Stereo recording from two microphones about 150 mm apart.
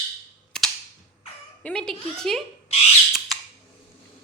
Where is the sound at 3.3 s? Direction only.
Centre (ahead or behind).